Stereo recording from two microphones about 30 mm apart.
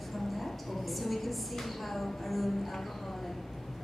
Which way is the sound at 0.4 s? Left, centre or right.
Centre.